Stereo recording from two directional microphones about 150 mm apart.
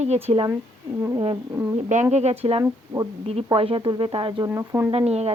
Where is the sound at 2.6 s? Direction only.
25° right (ahead or behind).